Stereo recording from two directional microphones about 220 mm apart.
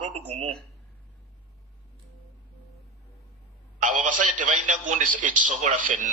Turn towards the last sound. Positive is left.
turn(degrees=-35)  # may be behind; listen again after turning